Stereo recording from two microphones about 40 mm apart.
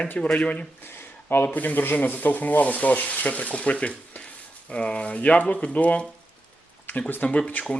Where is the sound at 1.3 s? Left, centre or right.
Left.